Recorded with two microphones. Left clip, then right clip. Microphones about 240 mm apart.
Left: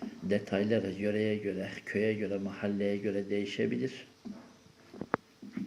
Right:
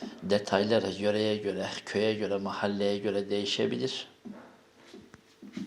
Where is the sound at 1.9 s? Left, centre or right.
Right.